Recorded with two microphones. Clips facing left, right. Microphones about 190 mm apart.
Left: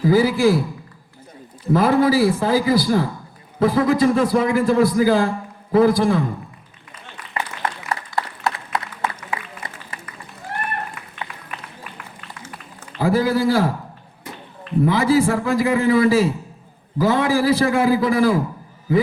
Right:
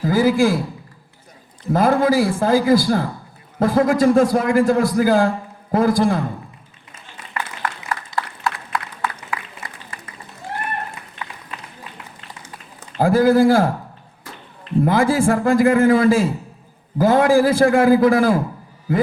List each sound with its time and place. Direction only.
0.0 s a man's voice: 50° right (ahead or behind)
1.7 s a man's voice: 50° right (ahead or behind)
7.3 s a sound: 25° left (ahead or behind)
13.0 s a man's voice: 50° right (ahead or behind)
14.8 s a man's voice: 50° right (ahead or behind)